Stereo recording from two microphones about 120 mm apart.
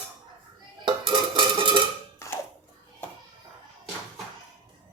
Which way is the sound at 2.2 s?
25° left (ahead or behind).